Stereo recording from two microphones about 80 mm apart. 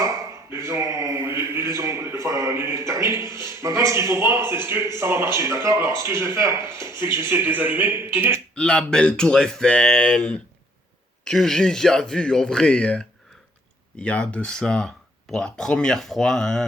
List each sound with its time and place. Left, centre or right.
0.0 s speech: right
8.5 s speech: centre